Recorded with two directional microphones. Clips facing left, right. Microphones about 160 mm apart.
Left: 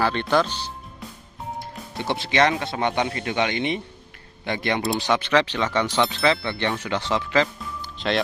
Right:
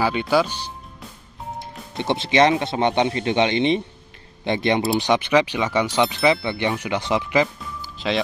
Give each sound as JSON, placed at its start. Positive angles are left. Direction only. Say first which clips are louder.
{"t": 0.0, "sound": "speech", "louder": "right 2 dB", "side_deg": -10}
{"t": 7.8, "sound": "music", "louder": "even", "side_deg": 0}